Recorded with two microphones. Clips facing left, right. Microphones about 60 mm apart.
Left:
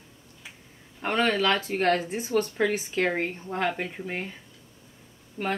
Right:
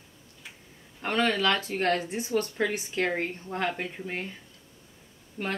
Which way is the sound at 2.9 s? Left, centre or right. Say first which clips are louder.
Left 2 dB; centre.